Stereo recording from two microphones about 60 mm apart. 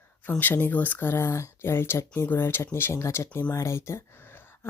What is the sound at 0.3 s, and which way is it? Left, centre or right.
Speech, left.